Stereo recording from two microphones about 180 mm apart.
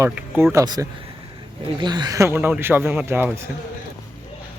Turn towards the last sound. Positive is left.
turn(degrees=-10)  # may be behind; listen again after turning